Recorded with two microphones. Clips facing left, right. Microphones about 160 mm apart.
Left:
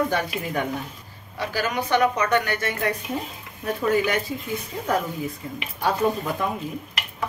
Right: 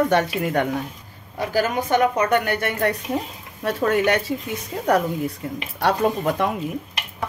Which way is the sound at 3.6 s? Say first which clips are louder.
Right 2 dB; 75° right (ahead or behind).